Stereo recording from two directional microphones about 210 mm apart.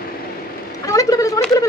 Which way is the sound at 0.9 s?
15° left (ahead or behind).